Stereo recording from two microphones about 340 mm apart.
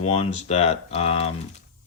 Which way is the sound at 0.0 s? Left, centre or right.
Centre.